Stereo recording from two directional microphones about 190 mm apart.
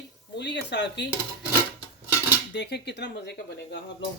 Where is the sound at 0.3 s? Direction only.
65° left (ahead or behind).